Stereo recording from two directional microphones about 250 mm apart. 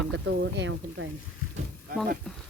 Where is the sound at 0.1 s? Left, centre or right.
Right.